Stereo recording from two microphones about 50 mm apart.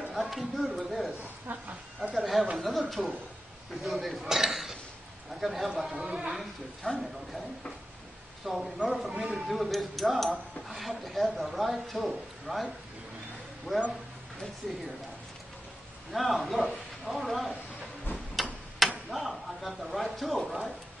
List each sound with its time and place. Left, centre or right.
0.1 s speech: centre
1.5 s speech: right
2.1 s chatter: centre
2.5 s a man's voice: centre
6.3 s a man's voice: centre
8.5 s a man's voice: centre
8.7 s speech: centre
9.2 s a man's voice: centre
13.7 s speech: centre
16.1 s a man's voice: centre
18.1 s tick-tock: centre
19.0 s speech: centre